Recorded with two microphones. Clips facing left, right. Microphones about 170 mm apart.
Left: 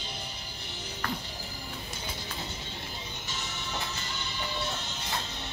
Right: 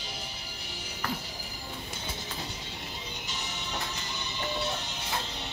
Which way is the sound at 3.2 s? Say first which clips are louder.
Left 1 dB; 15° right (ahead or behind).